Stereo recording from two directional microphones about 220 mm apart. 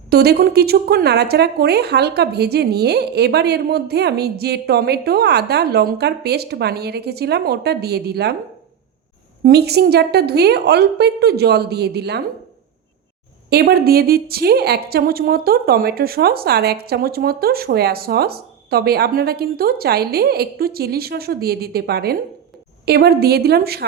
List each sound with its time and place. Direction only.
0.1 s a woman's voice: 45° right (ahead or behind)
9.4 s a woman's voice: 45° right (ahead or behind)
13.5 s a woman's voice: 45° right (ahead or behind)